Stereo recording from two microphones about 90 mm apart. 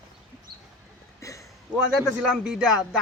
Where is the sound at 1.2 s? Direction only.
35° left (ahead or behind).